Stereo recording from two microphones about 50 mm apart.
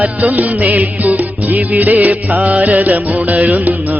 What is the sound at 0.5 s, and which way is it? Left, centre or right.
Music, right.